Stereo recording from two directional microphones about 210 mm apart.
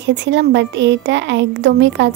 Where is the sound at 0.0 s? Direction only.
55° right (ahead or behind).